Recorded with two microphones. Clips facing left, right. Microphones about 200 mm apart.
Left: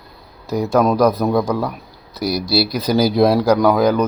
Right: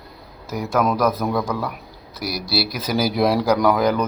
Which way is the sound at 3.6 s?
10° left (ahead or behind).